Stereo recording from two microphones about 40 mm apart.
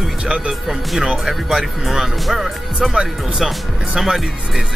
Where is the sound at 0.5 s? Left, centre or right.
Centre.